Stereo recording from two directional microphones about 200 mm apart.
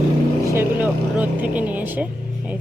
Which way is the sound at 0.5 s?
10° right (ahead or behind).